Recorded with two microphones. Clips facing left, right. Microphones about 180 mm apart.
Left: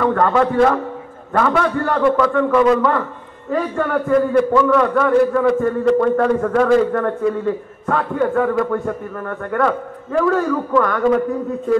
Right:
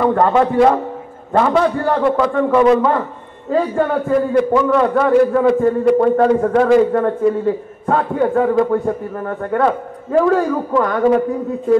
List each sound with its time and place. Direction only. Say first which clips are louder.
0.0 s a man's voice: right 2 dB; 25° right (ahead or behind)